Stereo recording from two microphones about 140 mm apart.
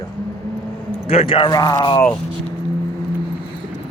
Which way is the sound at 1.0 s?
45° left (ahead or behind).